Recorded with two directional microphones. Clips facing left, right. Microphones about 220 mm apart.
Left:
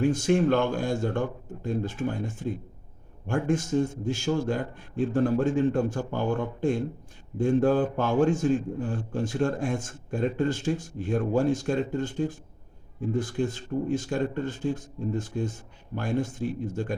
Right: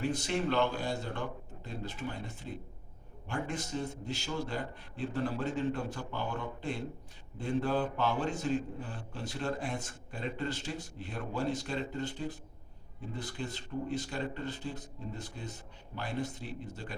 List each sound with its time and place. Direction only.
0.0 s a man's voice: 45° left (ahead or behind)